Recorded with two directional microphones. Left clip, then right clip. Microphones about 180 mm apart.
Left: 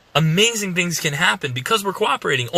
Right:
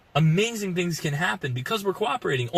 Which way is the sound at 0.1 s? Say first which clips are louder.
Left 7 dB; 15° left (ahead or behind).